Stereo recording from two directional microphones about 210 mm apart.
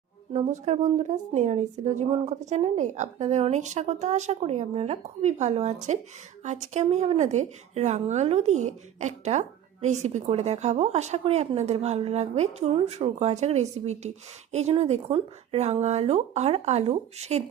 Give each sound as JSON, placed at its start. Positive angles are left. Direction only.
{"t": 0.3, "sound": "a woman's voice", "side_deg": -30}